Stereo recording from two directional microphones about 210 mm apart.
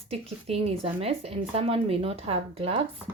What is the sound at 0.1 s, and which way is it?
A woman's voice, 30° right (ahead or behind).